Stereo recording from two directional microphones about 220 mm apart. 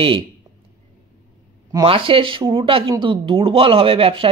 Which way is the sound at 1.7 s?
20° right (ahead or behind).